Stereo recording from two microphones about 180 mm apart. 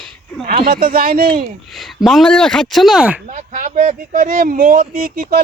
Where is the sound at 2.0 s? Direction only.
Centre (ahead or behind).